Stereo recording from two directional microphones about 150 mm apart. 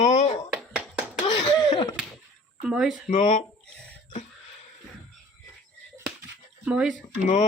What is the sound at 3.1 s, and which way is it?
Speech, 50° left (ahead or behind).